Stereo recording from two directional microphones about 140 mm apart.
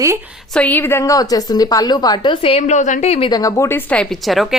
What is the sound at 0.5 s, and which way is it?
A woman's voice, 10° left (ahead or behind).